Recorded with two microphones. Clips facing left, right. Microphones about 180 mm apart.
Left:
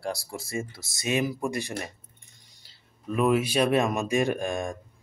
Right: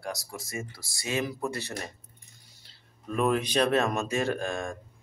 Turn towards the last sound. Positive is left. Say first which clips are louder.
# left 2 dB
turn(degrees=15)  # may be behind; listen again after turning